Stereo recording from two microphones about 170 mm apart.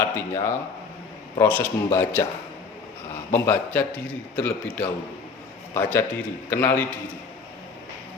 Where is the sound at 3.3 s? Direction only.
15° left (ahead or behind).